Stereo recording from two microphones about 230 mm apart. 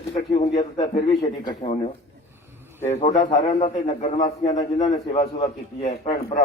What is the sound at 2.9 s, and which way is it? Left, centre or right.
Speech, left.